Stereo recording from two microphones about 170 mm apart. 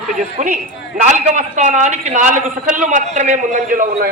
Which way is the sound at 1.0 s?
45° right (ahead or behind).